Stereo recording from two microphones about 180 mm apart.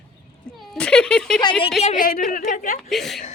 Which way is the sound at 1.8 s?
50° left (ahead or behind).